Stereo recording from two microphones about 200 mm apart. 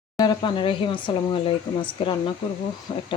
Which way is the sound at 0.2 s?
25° left (ahead or behind).